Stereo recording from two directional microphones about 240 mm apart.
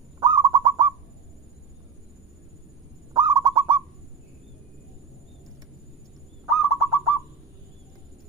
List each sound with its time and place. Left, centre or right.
0.2 s owl: right
3.1 s owl: centre
6.4 s owl: centre